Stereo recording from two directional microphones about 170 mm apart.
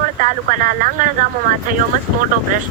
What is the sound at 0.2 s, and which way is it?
Speech, 50° right (ahead or behind).